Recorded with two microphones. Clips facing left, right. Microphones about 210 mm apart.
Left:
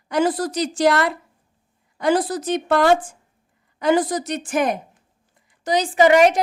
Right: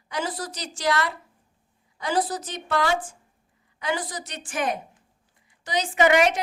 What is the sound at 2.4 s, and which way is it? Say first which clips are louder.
A woman's voice: left 9 dB; 55° left (ahead or behind).